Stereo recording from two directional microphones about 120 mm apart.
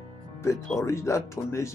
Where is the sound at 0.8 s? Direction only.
25° left (ahead or behind).